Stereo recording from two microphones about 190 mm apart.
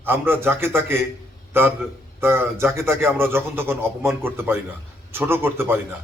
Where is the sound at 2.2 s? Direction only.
10° right (ahead or behind).